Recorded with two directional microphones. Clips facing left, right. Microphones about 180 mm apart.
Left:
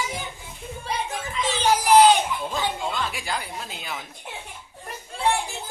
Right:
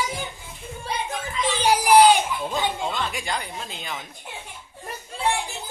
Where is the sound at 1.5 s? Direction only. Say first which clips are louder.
Right 1 dB; 10° right (ahead or behind).